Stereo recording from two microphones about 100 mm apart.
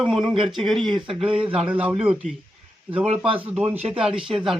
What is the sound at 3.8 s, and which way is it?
Speech, 90° right.